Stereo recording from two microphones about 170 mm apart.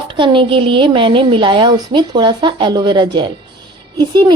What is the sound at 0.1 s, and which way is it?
A woman's voice, 30° right (ahead or behind).